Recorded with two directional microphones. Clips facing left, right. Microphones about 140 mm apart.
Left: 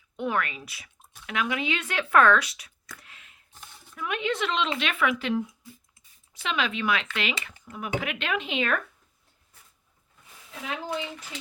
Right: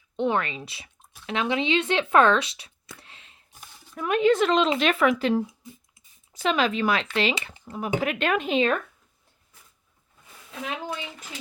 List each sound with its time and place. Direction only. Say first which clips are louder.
0.2 s speech: right 4 dB; 25° right (ahead or behind)
3.9 s speech: right 9 dB; 40° right (ahead or behind)